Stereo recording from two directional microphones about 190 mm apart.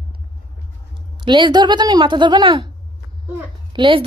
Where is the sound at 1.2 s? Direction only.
25° right (ahead or behind).